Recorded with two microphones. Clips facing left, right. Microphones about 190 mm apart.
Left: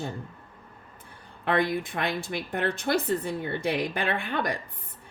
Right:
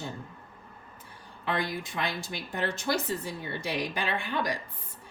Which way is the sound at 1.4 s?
55° left (ahead or behind).